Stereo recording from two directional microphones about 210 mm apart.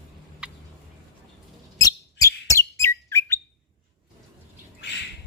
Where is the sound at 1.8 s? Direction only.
15° left (ahead or behind).